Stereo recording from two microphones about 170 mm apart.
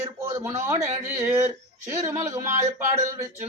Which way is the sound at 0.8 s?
40° right (ahead or behind).